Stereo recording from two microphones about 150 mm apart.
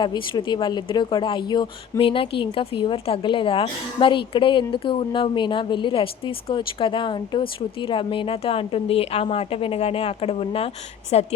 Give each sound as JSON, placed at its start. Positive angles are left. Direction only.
{"t": 0.0, "sound": "a woman's voice", "side_deg": 30}